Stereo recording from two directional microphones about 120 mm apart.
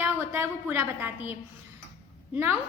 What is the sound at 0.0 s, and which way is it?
A woman's voice, 15° right (ahead or behind).